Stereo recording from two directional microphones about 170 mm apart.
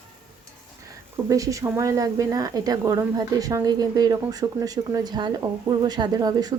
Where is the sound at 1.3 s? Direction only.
20° right (ahead or behind).